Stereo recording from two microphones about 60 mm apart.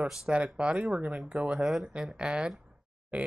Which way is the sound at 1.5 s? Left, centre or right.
Centre.